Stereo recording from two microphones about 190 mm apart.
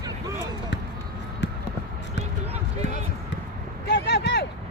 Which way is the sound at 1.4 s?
70° left (ahead or behind).